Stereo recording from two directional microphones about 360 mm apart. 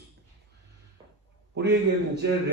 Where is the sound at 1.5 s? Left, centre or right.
Right.